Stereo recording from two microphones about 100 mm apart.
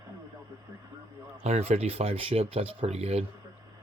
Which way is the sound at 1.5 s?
90° right.